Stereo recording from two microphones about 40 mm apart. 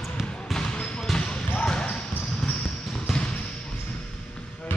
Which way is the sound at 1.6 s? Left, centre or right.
Left.